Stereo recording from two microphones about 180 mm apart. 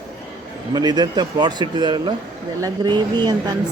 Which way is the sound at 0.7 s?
25° right (ahead or behind).